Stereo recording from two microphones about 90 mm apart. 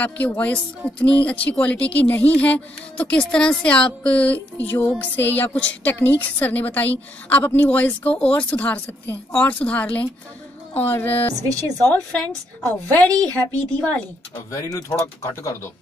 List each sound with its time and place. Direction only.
0.0 s speech: 20° left (ahead or behind)
11.4 s a woman's voice: 45° right (ahead or behind)
11.9 s speech: 15° left (ahead or behind)
13.1 s a woman's voice: 45° right (ahead or behind)
14.5 s speech: 35° left (ahead or behind)